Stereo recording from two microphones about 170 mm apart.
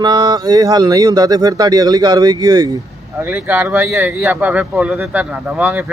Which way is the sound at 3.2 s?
10° right (ahead or behind).